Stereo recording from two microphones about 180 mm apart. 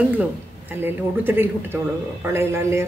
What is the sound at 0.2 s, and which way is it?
Speech, 10° right (ahead or behind).